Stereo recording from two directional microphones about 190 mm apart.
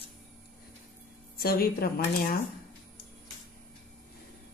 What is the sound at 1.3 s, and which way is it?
A woman's voice, 50° left (ahead or behind).